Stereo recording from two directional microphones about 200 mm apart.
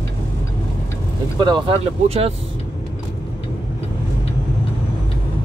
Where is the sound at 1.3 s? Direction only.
25° right (ahead or behind).